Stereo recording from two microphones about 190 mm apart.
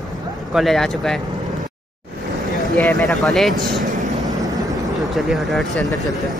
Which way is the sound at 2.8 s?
Centre (ahead or behind).